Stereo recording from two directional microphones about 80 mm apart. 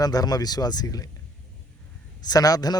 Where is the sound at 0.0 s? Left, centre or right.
Left.